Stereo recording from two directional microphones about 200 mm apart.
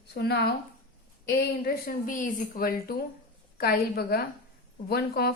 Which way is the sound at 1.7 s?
45° left (ahead or behind).